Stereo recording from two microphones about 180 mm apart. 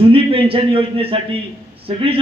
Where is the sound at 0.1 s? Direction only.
30° right (ahead or behind).